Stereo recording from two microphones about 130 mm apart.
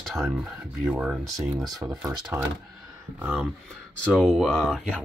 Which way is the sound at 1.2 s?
25° right (ahead or behind).